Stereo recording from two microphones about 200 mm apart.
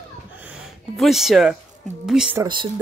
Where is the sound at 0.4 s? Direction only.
5° right (ahead or behind).